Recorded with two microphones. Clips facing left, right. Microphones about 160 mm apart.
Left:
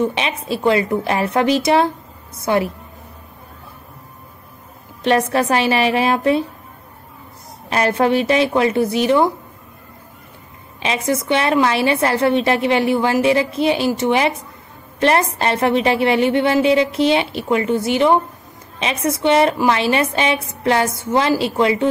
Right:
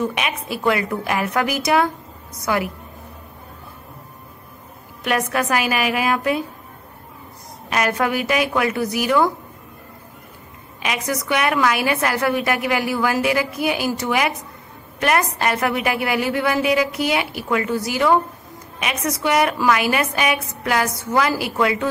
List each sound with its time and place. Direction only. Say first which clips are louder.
0.0 s a woman's voice: left 3 dB; 25° left (ahead or behind)
5.0 s a woman's voice: left 5 dB; 30° left (ahead or behind)
7.7 s a woman's voice: left 4 dB; 30° left (ahead or behind)
10.8 s a woman's voice: left 4 dB; 25° left (ahead or behind)